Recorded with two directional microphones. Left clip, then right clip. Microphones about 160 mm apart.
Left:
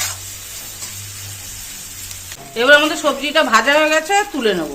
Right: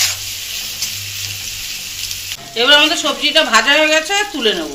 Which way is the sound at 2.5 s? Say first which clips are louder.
Right 1 dB; 40° left (ahead or behind).